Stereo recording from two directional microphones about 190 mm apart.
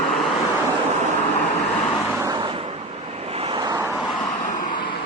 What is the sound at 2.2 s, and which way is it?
Vehicle, 20° right (ahead or behind).